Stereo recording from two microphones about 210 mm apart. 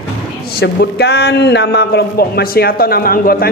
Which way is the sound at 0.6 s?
50° left (ahead or behind).